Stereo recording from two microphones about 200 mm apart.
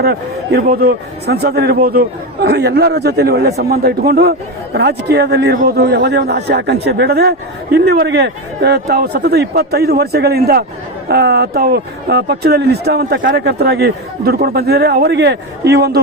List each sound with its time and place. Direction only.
0.0 s a man's voice: 50° right (ahead or behind)